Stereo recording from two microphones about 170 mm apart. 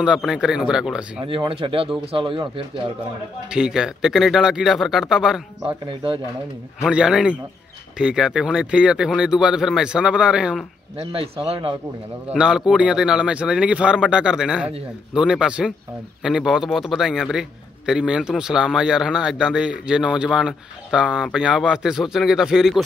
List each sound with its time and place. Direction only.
0.0 s a man's voice: 5° right (ahead or behind)
1.2 s speech: 30° right (ahead or behind)
3.4 s a man's voice: 5° right (ahead or behind)
6.8 s a man's voice: 5° right (ahead or behind)
11.0 s speech: 35° right (ahead or behind)
12.3 s a man's voice: 5° right (ahead or behind)